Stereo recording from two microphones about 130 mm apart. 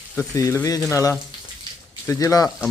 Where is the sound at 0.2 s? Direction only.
20° left (ahead or behind).